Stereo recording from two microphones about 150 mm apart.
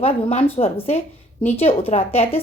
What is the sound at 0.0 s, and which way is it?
A woman's voice, 40° left (ahead or behind).